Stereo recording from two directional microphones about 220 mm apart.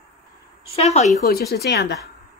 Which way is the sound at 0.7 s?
30° left (ahead or behind).